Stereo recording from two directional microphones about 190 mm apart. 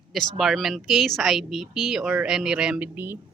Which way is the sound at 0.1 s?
Centre (ahead or behind).